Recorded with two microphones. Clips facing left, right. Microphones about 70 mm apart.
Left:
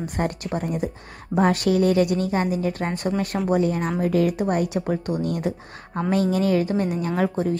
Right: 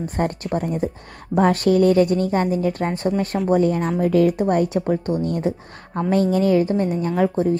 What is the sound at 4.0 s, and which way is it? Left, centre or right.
A woman's voice, right.